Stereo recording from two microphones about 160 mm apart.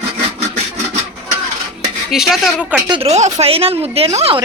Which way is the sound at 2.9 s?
40° right (ahead or behind).